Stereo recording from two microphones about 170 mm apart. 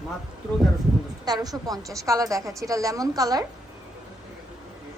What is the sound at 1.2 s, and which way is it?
A woman's voice, 25° right (ahead or behind).